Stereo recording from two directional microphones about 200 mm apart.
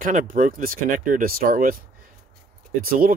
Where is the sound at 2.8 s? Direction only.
45° right (ahead or behind).